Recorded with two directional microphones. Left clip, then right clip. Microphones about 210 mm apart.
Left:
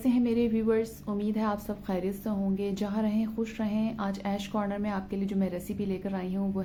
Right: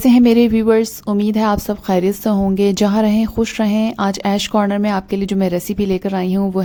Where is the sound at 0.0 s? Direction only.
50° right (ahead or behind).